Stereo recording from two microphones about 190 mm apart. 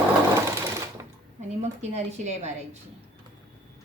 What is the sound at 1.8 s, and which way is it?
Speech, 35° right (ahead or behind).